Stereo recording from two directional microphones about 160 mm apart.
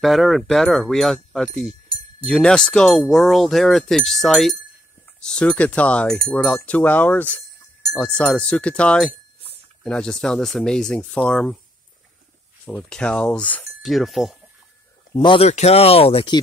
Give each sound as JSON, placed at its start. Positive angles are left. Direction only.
{"t": 0.0, "sound": "speech", "side_deg": 0}
{"t": 12.6, "sound": "speech", "side_deg": 5}
{"t": 15.1, "sound": "speech", "side_deg": 35}